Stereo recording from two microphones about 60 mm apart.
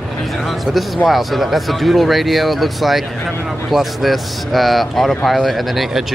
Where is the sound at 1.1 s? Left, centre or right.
Centre.